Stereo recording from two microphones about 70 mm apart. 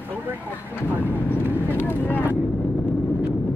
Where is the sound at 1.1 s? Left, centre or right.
Left.